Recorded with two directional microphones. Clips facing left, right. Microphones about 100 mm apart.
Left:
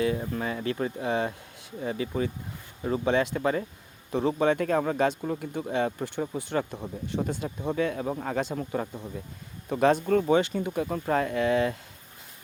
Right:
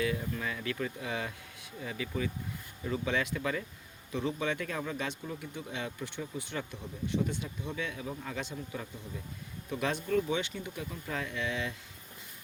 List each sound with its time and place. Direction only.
0.0 s speech: 35° left (ahead or behind)